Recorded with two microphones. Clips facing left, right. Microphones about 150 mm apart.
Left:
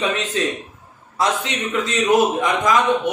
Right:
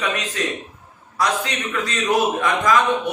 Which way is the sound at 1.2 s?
20° left (ahead or behind).